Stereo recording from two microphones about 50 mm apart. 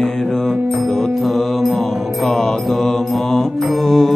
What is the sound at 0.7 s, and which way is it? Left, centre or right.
Mantra, centre.